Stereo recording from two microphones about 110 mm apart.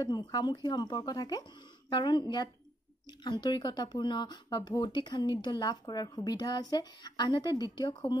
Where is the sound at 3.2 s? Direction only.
40° left (ahead or behind).